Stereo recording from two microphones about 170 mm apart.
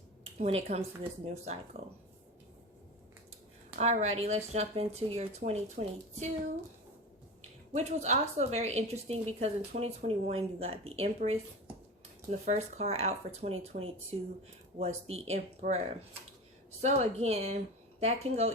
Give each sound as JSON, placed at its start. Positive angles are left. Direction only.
{"t": 0.3, "sound": "a woman's voice", "side_deg": -40}
{"t": 3.8, "sound": "a woman's voice", "side_deg": -40}
{"t": 7.7, "sound": "a woman's voice", "side_deg": -40}
{"t": 12.5, "sound": "a woman's voice", "side_deg": -40}